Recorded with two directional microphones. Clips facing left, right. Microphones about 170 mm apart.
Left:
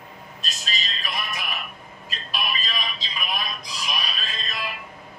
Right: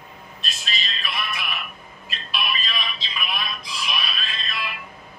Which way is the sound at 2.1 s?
40° left (ahead or behind).